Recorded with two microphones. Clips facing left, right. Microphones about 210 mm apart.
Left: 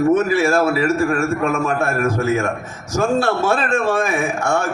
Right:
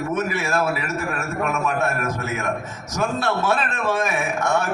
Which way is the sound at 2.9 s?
30° left (ahead or behind).